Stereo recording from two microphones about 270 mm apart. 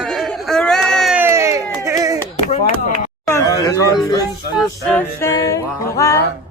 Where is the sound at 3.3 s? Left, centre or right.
Centre.